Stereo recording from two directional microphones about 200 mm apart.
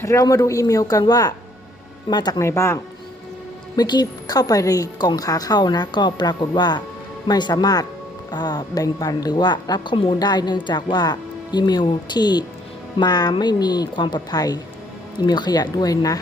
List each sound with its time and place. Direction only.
0.0 s speech: 15° left (ahead or behind)
3.8 s a woman's voice: 20° left (ahead or behind)